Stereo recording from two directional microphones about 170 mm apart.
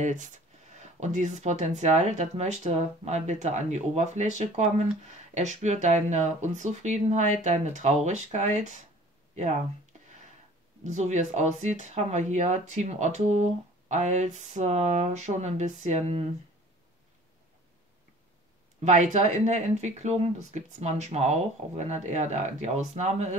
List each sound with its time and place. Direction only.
0.0 s speech: 45° right (ahead or behind)
10.8 s speech: 45° right (ahead or behind)
18.9 s speech: 45° right (ahead or behind)